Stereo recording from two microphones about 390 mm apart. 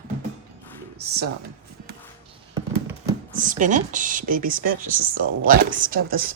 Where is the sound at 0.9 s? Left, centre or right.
Right.